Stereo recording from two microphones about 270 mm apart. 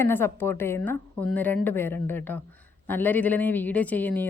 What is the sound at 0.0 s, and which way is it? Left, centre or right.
A woman's voice, centre.